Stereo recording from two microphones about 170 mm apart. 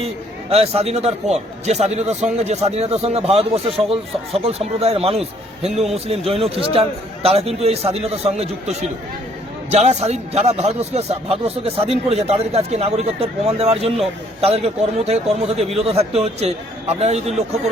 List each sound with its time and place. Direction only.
0.5 s a man's voice: 35° right (ahead or behind)